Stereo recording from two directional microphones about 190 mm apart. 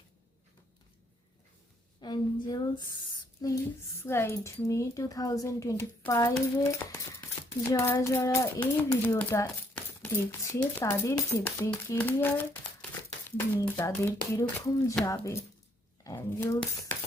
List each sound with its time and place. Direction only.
2.0 s a woman's voice: 25° left (ahead or behind)